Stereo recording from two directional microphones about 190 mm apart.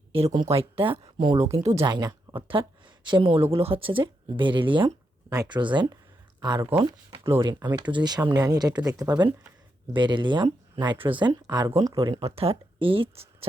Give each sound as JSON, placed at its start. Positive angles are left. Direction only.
{"t": 0.4, "sound": "speech", "side_deg": -30}
{"t": 1.8, "sound": "speech", "side_deg": -20}
{"t": 11.9, "sound": "speech", "side_deg": -30}